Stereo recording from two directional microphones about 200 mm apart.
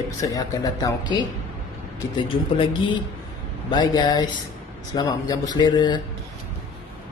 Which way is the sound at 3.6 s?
20° left (ahead or behind).